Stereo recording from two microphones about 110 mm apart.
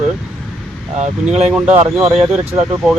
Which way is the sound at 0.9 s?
10° right (ahead or behind).